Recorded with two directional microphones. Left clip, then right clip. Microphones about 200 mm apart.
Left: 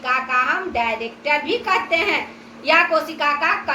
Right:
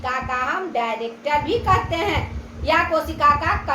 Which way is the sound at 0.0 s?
30° right (ahead or behind).